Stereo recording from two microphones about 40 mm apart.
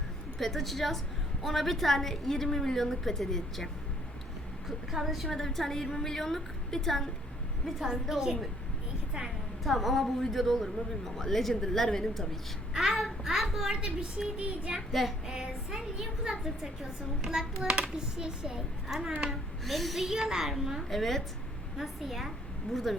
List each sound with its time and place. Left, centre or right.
0.3 s a woman's voice: centre
4.9 s a woman's voice: centre
7.9 s a woman's voice: centre
9.6 s a woman's voice: centre
12.7 s a woman's voice: centre
13.2 s a sound: centre
13.7 s speech: right
14.3 s child singing: right
15.0 s a woman's voice: centre
15.3 s a woman's voice: centre
17.7 s child singing: right
17.9 s speech: centre
18.9 s a woman's voice: centre